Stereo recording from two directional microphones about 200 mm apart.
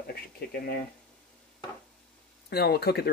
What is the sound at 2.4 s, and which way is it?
Speech, 55° left (ahead or behind).